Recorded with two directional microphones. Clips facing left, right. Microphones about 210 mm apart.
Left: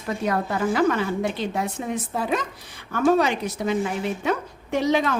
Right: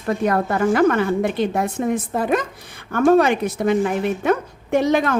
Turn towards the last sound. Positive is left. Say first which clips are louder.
# right 4 dB
turn(degrees=-50)  # may be behind; listen again after turning